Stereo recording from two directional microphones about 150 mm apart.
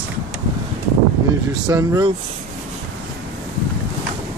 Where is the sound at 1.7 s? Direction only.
25° right (ahead or behind).